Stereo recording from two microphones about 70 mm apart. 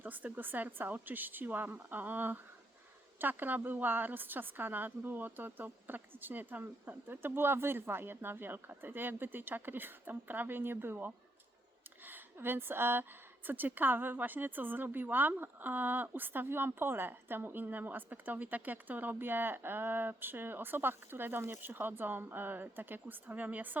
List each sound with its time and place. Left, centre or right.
0.0 s a woman's voice: right